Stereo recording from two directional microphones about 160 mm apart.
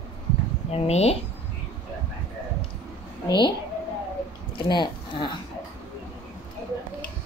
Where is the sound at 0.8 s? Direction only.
40° left (ahead or behind).